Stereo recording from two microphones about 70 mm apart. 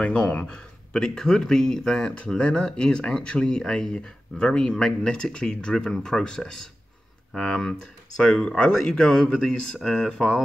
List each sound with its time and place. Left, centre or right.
0.0 s speech: centre